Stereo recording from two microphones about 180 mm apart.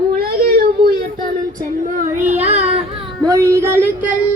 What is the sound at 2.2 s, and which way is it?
Child singing, 40° right (ahead or behind).